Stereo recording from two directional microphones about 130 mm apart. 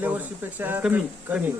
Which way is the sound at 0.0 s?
15° right (ahead or behind).